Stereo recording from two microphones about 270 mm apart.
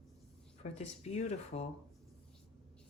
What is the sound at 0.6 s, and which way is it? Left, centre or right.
Speech, left.